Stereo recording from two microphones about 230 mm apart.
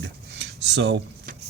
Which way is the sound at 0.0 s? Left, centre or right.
Right.